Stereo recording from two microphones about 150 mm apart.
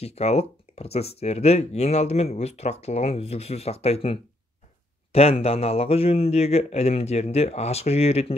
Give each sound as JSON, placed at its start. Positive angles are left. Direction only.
{"t": 0.0, "sound": "speech", "side_deg": 45}